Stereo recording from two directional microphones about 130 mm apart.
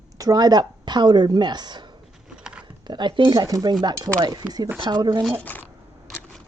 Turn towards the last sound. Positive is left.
turn(degrees=15)  # may be behind; listen again after turning